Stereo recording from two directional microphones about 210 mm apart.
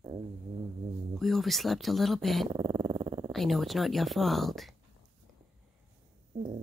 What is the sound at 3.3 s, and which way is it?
Speech, centre (ahead or behind).